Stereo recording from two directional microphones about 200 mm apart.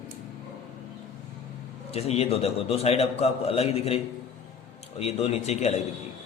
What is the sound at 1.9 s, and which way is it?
A man's voice, 30° left (ahead or behind).